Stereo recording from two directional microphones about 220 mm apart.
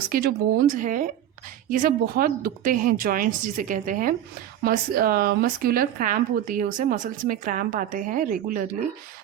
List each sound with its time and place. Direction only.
0.1 s speech: 45° right (ahead or behind)